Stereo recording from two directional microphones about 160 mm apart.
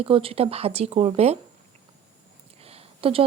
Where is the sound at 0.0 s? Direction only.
35° right (ahead or behind).